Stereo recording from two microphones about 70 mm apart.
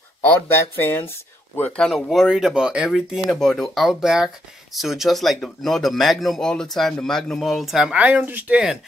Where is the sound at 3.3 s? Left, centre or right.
Centre.